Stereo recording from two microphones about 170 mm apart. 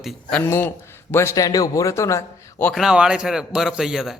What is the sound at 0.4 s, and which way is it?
A man's voice, 15° left (ahead or behind).